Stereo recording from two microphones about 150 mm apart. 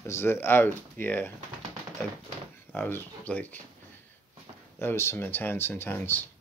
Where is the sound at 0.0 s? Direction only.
15° left (ahead or behind).